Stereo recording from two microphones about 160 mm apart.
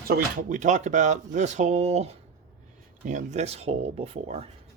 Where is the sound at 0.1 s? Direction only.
55° right (ahead or behind); by 4.4 s 40° right (ahead or behind).